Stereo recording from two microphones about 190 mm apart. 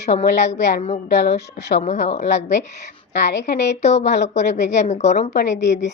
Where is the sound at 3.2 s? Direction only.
65° left (ahead or behind).